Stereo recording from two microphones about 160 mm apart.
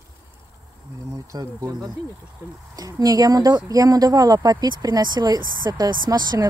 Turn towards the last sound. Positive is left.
turn(degrees=-25)  # may be behind; listen again after turning